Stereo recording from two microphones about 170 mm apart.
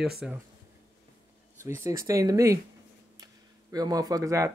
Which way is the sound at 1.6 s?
15° right (ahead or behind).